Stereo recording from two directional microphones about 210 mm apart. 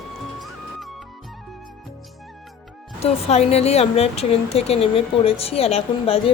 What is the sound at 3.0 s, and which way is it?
A woman's voice, 30° left (ahead or behind).